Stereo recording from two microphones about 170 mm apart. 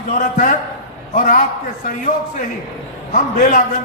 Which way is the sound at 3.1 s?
50° left (ahead or behind).